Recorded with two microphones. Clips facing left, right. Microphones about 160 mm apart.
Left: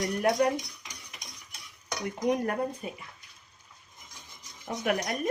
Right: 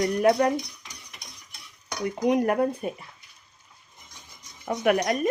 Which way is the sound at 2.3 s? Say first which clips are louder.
Right 8 dB; 75° right (ahead or behind).